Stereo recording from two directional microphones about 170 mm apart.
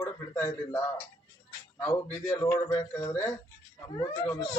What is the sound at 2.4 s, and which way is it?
Speech, 15° left (ahead or behind).